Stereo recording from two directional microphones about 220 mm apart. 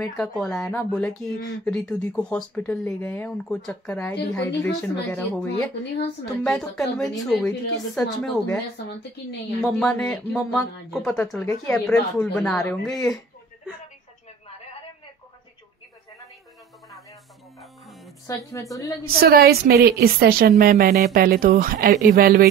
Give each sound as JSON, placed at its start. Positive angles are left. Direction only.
{"t": 0.0, "sound": "speech", "side_deg": 0}
{"t": 6.4, "sound": "speech", "side_deg": 0}
{"t": 9.6, "sound": "speech", "side_deg": 5}
{"t": 17.6, "sound": "music", "side_deg": 0}
{"t": 18.2, "sound": "a woman's voice", "side_deg": 15}
{"t": 19.0, "sound": "a woman's voice", "side_deg": -45}